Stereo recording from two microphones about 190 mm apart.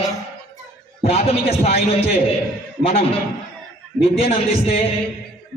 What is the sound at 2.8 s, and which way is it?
Speech, 30° left (ahead or behind).